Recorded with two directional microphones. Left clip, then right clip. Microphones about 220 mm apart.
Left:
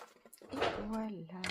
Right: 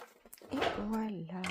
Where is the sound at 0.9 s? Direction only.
40° right (ahead or behind).